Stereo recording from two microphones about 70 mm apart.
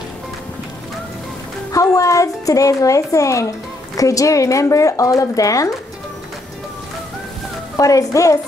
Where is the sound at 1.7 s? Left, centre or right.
Left.